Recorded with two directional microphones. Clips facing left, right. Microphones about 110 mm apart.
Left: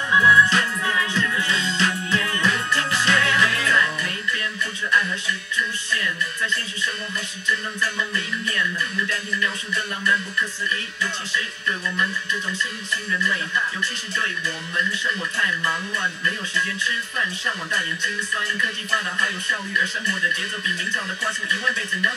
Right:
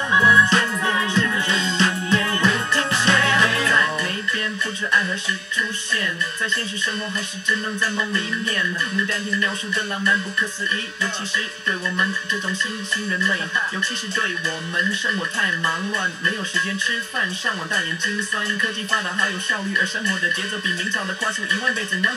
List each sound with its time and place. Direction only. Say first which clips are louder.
0.1 s music: even; 25° right (ahead or behind)
7.8 s music: right 3 dB; 30° right (ahead or behind)
13.2 s speech: even; 30° right (ahead or behind)
18.9 s speech: right 1 dB; 30° right (ahead or behind)